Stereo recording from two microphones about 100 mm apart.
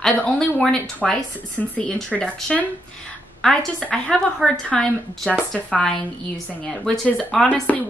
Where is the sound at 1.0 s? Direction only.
Centre (ahead or behind).